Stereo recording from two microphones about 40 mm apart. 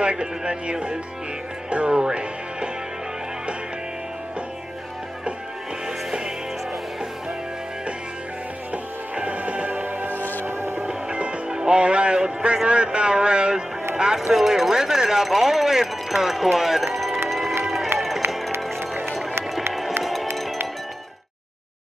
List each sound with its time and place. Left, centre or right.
0.0 s speech: right
2.0 s music: right
8.7 s music: right
10.4 s music: right
10.9 s music: right
12.6 s speech: right; by 17.2 s centre
17.3 s run: centre
17.9 s music: centre
20.0 s music: centre